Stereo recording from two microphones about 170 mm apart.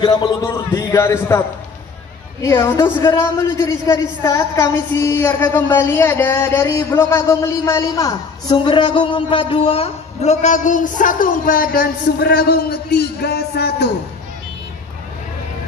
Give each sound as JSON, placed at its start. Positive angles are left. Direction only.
{"t": 0.0, "sound": "a man's voice", "side_deg": 25}
{"t": 0.4, "sound": "a man's voice", "side_deg": 15}
{"t": 2.4, "sound": "a man's voice", "side_deg": 15}